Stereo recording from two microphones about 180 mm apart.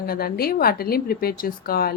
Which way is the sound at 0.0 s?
55° left (ahead or behind).